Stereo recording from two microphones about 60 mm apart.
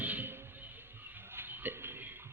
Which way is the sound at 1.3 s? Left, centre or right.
Right.